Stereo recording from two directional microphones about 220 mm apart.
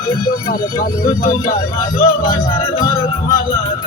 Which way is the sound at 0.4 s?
40° left (ahead or behind).